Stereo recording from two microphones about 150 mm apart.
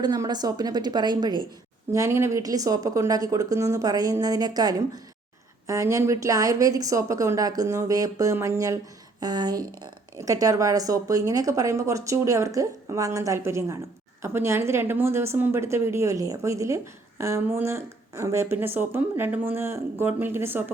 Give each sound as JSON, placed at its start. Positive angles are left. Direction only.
{"t": 0.0, "sound": "a woman's voice", "side_deg": -25}
{"t": 1.9, "sound": "a woman's voice", "side_deg": -20}